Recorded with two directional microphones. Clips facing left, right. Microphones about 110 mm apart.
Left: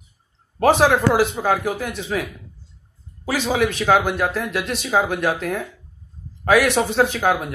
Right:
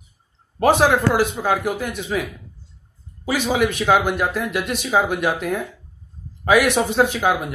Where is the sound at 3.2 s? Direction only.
5° right (ahead or behind).